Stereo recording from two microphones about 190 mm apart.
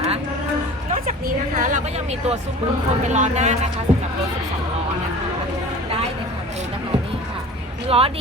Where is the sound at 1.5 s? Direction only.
40° right (ahead or behind).